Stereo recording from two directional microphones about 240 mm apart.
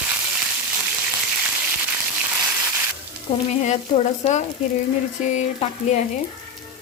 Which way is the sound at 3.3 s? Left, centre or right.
Left.